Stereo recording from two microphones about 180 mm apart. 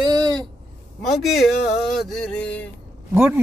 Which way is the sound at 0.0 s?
20° right (ahead or behind).